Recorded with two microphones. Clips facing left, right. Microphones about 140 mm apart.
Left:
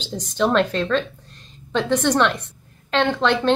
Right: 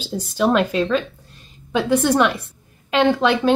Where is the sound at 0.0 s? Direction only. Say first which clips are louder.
Right 2 dB; 10° right (ahead or behind).